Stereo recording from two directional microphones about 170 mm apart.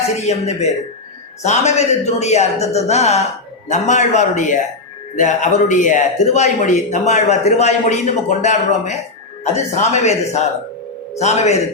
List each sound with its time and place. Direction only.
0.2 s a man's voice: 40° left (ahead or behind)